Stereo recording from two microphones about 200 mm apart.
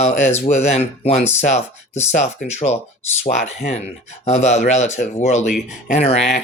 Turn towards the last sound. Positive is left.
turn(degrees=30)  # may be behind; listen again after turning